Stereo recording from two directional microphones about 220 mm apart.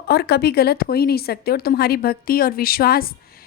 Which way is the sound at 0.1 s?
45° left (ahead or behind).